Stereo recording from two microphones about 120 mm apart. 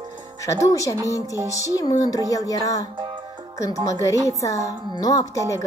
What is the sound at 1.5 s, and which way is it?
A woman's voice, 30° left (ahead or behind).